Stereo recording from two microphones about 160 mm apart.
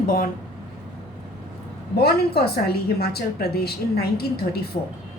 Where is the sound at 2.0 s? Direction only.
80° left.